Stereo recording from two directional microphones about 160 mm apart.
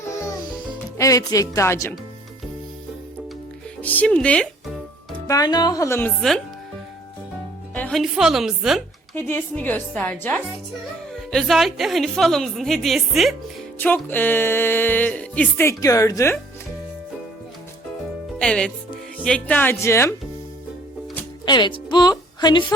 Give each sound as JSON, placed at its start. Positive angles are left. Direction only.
{"t": 0.9, "sound": "speech", "side_deg": 20}
{"t": 3.8, "sound": "music", "side_deg": 10}
{"t": 5.3, "sound": "speech", "side_deg": 25}
{"t": 7.7, "sound": "speech", "side_deg": 10}
{"t": 9.1, "sound": "music", "side_deg": 15}
{"t": 11.1, "sound": "a woman's voice", "side_deg": 0}
{"t": 13.7, "sound": "music", "side_deg": 10}
{"t": 18.3, "sound": "speech", "side_deg": 5}
{"t": 19.2, "sound": "music", "side_deg": 10}
{"t": 21.4, "sound": "a woman's voice", "side_deg": 30}